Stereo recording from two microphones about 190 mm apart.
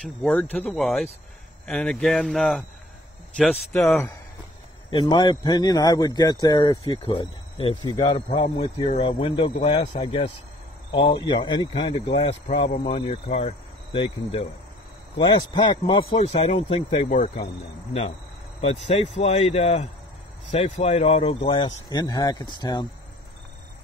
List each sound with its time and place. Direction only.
0.0 s speech: 5° left (ahead or behind)
4.9 s a man's voice: 20° left (ahead or behind)
18.6 s a man's voice: 35° left (ahead or behind)
21.9 s speech: 20° left (ahead or behind)